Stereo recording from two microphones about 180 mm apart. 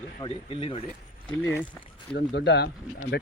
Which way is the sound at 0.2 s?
30° left (ahead or behind).